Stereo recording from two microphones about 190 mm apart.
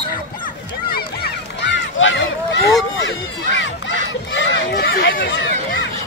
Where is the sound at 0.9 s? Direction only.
60° left (ahead or behind).